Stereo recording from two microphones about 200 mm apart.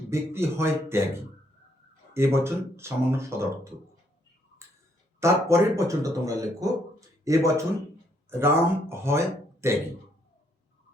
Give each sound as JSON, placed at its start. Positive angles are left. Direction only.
{"t": 0.1, "sound": "speech", "side_deg": -10}
{"t": 2.1, "sound": "speech", "side_deg": -15}
{"t": 5.2, "sound": "speech", "side_deg": -15}